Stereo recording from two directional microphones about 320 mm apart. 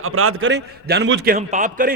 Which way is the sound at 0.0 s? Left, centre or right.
Right.